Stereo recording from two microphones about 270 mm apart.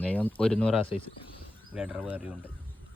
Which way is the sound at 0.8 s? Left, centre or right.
Centre.